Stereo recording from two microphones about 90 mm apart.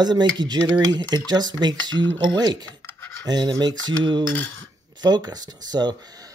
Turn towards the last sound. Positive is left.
turn(degrees=-50)  # may be behind; listen again after turning